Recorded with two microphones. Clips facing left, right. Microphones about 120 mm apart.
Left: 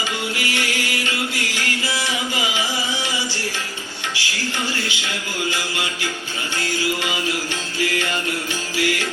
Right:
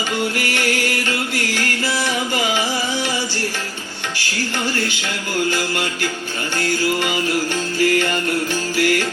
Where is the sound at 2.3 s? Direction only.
50° right (ahead or behind).